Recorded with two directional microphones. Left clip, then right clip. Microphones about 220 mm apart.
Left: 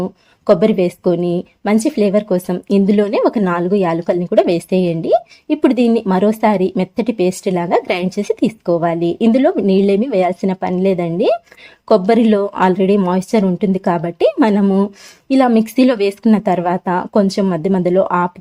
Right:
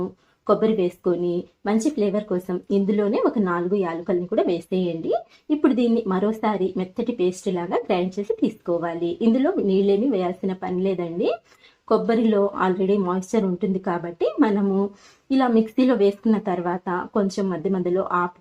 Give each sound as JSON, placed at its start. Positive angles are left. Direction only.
{"t": 0.4, "sound": "a woman's voice", "side_deg": 45}